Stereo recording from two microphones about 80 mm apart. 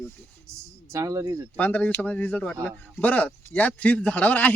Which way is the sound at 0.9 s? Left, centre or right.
Right.